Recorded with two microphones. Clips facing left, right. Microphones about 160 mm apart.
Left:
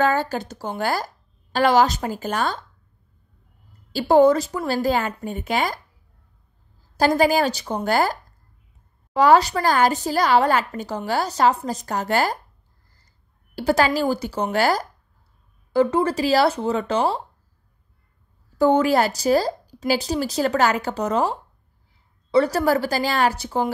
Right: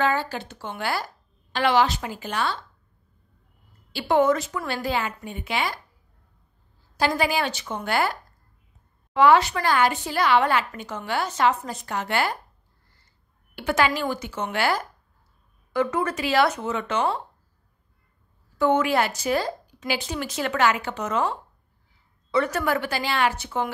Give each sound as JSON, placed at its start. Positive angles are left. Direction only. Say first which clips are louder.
{"t": 0.0, "sound": "speech", "louder": "left 4 dB", "side_deg": 45}
{"t": 3.9, "sound": "speech", "louder": "left 5 dB", "side_deg": 35}
{"t": 7.0, "sound": "speech", "louder": "left 6 dB", "side_deg": 40}
{"t": 13.6, "sound": "speech", "louder": "left 4 dB", "side_deg": 35}
{"t": 18.6, "sound": "speech", "louder": "left 4 dB", "side_deg": 35}